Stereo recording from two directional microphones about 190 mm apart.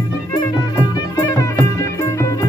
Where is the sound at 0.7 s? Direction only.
20° left (ahead or behind).